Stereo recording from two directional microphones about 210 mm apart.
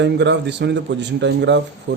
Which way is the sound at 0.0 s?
55° right (ahead or behind).